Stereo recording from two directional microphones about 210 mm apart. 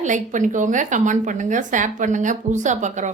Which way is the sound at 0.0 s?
35° right (ahead or behind).